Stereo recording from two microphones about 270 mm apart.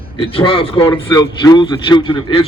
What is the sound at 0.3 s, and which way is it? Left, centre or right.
A man's voice, centre.